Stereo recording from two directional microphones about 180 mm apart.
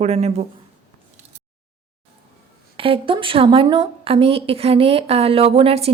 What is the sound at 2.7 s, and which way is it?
A woman's voice, 30° right (ahead or behind).